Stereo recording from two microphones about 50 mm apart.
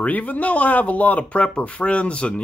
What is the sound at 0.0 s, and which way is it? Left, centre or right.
Speech, left.